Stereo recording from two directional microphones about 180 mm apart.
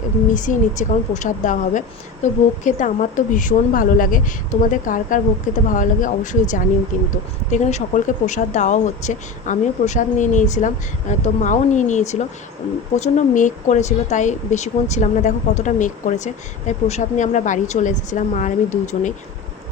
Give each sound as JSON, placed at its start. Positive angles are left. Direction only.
{"t": 0.3, "sound": "speech", "side_deg": 45}